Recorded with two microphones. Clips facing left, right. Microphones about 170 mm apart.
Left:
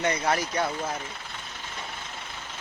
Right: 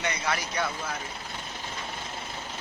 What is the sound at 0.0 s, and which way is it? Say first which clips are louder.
Speech: left 5 dB; 45° left (ahead or behind).